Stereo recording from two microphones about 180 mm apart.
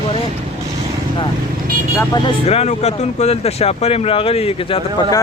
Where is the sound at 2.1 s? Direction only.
25° left (ahead or behind).